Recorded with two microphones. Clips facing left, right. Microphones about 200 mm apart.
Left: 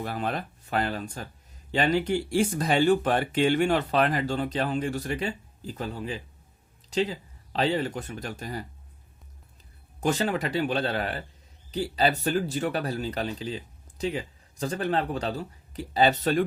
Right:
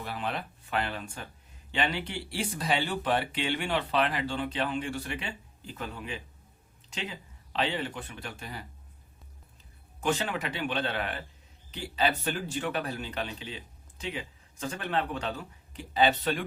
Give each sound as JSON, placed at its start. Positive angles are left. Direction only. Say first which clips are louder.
{"t": 0.0, "sound": "speech", "louder": "left 4 dB", "side_deg": 45}
{"t": 10.0, "sound": "speech", "louder": "left 4 dB", "side_deg": 40}